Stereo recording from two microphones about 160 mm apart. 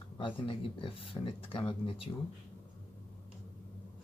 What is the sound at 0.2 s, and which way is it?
Speech, 30° left (ahead or behind).